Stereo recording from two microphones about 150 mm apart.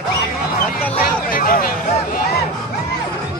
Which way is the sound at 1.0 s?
70° left (ahead or behind).